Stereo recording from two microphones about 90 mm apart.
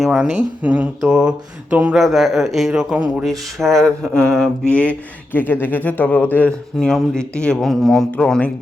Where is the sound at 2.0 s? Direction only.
Centre (ahead or behind).